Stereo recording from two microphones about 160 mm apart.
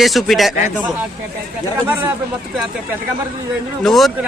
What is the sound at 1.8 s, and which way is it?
Speech, 10° right (ahead or behind).